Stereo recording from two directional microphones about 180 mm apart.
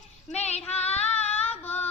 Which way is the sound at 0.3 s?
35° left (ahead or behind).